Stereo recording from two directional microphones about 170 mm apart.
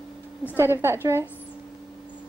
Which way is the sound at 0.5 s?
15° right (ahead or behind).